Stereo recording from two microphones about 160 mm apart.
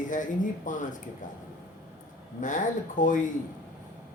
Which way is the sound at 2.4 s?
55° left (ahead or behind).